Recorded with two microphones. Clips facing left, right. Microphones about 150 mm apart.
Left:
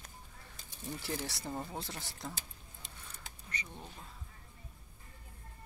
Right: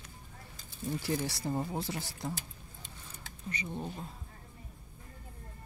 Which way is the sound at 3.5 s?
20° right (ahead or behind).